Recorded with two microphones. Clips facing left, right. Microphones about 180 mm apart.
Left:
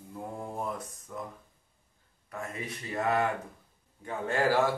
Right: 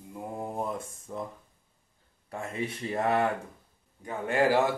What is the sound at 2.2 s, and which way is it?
Mantra, 30° right (ahead or behind).